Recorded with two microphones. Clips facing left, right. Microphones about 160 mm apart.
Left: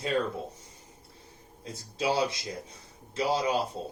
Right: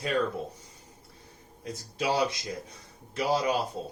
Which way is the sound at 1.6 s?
25° left (ahead or behind).